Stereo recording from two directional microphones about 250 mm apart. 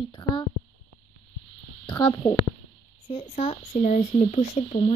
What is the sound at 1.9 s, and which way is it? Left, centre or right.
Speech, centre.